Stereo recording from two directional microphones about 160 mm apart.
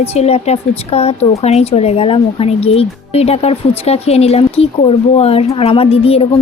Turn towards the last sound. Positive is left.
turn(degrees=35)  # may be behind; listen again after turning